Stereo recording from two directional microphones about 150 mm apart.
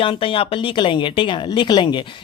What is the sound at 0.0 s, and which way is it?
Speech, 35° left (ahead or behind).